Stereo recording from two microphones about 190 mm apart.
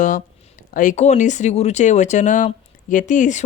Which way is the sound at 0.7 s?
45° left (ahead or behind).